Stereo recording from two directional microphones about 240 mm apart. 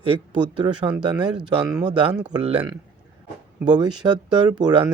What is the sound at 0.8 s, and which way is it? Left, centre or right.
Speech, right.